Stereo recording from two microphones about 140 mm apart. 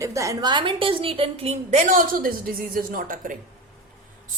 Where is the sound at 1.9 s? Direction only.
85° right.